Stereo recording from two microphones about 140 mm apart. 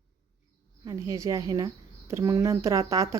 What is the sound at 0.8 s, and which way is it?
Speech, 25° right (ahead or behind).